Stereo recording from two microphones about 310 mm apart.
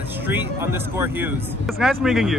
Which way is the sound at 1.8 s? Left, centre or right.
Centre.